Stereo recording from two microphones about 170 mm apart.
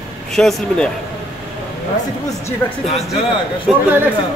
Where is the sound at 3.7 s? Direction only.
Centre (ahead or behind).